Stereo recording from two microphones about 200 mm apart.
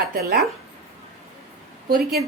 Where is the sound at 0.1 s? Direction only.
50° right (ahead or behind).